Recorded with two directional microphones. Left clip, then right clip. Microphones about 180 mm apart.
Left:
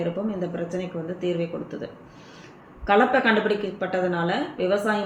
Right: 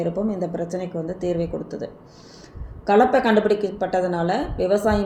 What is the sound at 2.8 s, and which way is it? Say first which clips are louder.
A woman's voice: right 2 dB; 45° right (ahead or behind).